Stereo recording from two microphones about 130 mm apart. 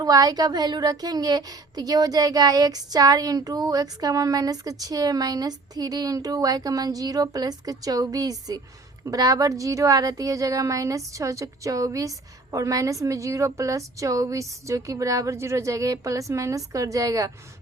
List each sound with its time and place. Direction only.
0.0 s a woman's voice: 30° right (ahead or behind)